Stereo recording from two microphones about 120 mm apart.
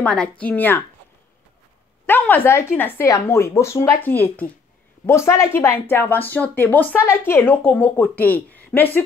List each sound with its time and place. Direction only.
0.0 s speech: 10° left (ahead or behind)
2.0 s speech: 15° left (ahead or behind)